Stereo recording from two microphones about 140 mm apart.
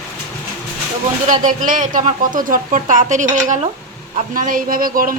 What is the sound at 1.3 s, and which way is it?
Speech, 70° right (ahead or behind).